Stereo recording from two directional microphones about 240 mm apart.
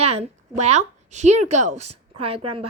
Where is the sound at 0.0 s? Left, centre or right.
Right.